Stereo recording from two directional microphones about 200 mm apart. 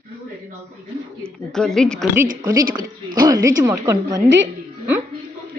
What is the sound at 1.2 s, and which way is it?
Speech, centre (ahead or behind).